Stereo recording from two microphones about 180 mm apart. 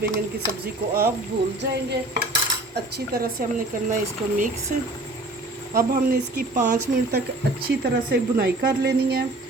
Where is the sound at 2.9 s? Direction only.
55° right (ahead or behind).